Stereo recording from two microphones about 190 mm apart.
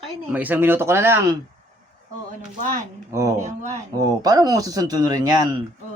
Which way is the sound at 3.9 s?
20° right (ahead or behind).